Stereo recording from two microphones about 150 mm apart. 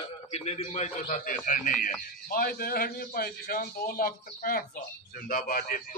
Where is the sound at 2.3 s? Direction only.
75° left (ahead or behind).